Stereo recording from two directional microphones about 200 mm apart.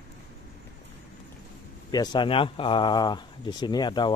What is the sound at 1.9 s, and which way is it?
Speech, 20° left (ahead or behind).